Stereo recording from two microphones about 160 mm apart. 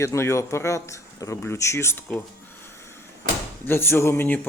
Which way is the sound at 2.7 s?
15° left (ahead or behind).